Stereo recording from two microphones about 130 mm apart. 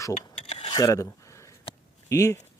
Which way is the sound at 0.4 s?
55° left (ahead or behind).